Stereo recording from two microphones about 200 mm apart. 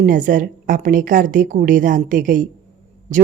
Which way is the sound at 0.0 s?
40° right (ahead or behind).